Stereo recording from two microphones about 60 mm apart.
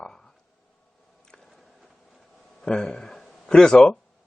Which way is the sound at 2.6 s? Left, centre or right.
Centre.